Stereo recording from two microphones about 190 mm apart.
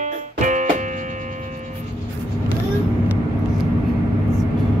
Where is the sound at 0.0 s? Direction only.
40° right (ahead or behind).